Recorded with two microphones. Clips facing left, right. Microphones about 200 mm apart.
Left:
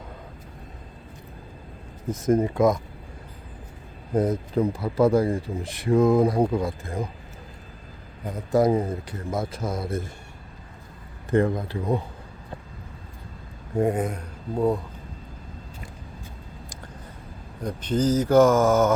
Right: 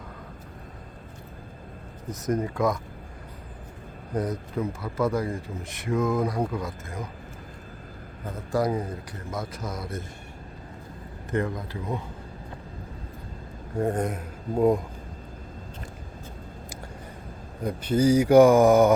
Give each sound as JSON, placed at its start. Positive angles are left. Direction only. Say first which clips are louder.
{"t": 2.0, "sound": "speech", "louder": "left 6 dB", "side_deg": 25}
{"t": 4.1, "sound": "speech", "louder": "left 6 dB", "side_deg": 25}
{"t": 8.2, "sound": "speech", "louder": "left 5 dB", "side_deg": 15}
{"t": 11.3, "sound": "speech", "louder": "left 6 dB", "side_deg": 30}
{"t": 13.7, "sound": "speech", "louder": "left 3 dB", "side_deg": 15}
{"t": 14.0, "sound": "filing", "louder": "even", "side_deg": 0}
{"t": 17.6, "sound": "speech", "louder": "right 1 dB", "side_deg": -10}